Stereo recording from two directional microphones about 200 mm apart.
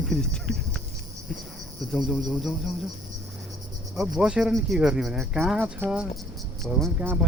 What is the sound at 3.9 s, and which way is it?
Speech, 5° right (ahead or behind).